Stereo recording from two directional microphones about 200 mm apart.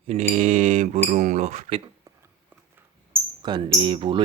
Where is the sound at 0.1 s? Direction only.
30° right (ahead or behind).